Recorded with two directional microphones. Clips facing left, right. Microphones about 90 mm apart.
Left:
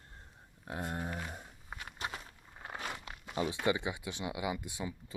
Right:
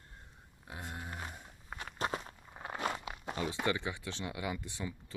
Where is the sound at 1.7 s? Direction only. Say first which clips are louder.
Right 5 dB; 35° right (ahead or behind).